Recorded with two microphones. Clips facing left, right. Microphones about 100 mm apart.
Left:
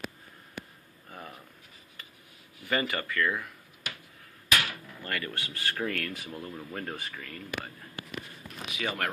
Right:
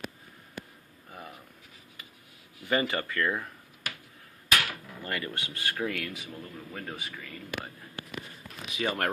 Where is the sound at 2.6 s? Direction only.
20° right (ahead or behind).